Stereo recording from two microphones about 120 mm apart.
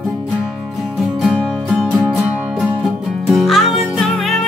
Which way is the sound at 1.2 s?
Centre (ahead or behind).